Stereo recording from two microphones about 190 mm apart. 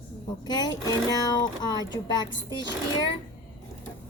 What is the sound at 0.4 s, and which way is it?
Speech, 20° left (ahead or behind).